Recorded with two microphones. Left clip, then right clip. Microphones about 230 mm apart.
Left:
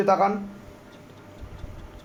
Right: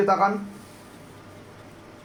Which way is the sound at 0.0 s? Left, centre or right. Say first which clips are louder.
Even; left.